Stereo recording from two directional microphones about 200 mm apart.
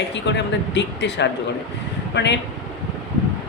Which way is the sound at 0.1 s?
60° left (ahead or behind).